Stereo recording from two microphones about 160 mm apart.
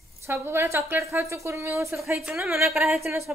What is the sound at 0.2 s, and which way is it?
A woman's voice, 15° right (ahead or behind).